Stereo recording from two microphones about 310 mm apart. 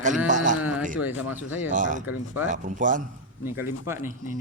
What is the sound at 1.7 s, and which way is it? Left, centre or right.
Speech, right.